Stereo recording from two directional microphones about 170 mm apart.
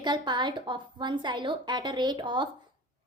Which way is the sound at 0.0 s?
25° right (ahead or behind).